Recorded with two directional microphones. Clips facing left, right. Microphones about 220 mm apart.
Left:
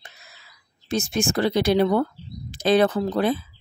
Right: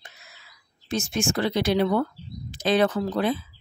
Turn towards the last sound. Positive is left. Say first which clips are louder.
# left 2 dB
turn(degrees=35)  # may be behind; listen again after turning